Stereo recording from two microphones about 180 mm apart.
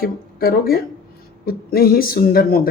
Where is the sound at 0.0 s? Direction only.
55° left (ahead or behind).